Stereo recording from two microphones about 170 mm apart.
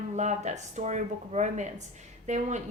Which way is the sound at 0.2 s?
45° right (ahead or behind).